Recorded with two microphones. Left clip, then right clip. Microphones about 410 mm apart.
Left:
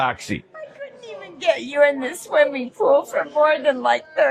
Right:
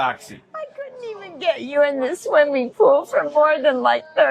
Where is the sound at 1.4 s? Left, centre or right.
Right.